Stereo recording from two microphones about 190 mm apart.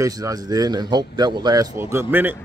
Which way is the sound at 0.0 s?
20° right (ahead or behind).